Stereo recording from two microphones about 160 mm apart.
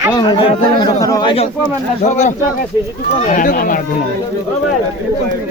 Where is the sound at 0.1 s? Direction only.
30° left (ahead or behind); by 3.8 s 60° left (ahead or behind).